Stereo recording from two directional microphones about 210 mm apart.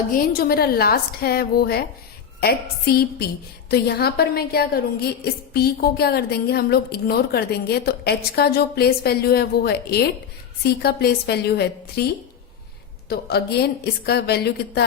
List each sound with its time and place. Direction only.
0.1 s a woman's voice: 45° left (ahead or behind)
13.1 s a woman's voice: 50° left (ahead or behind)